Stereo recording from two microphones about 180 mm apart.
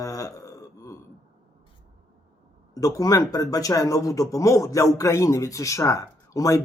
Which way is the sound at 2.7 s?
20° left (ahead or behind).